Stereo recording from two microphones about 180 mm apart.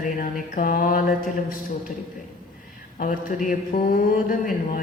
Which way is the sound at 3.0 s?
50° left (ahead or behind).